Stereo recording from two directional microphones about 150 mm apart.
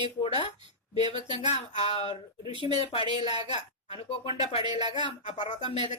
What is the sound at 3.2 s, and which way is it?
Speech, 30° right (ahead or behind).